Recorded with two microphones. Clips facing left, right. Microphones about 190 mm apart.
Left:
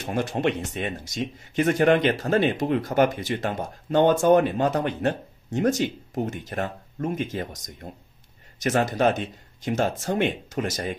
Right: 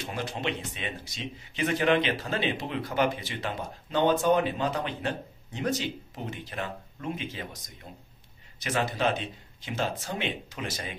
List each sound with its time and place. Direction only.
0.0 s speech: 50° left (ahead or behind)